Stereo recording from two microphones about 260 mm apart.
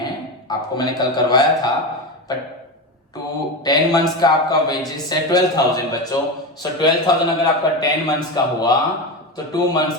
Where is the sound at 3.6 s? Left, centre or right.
Centre.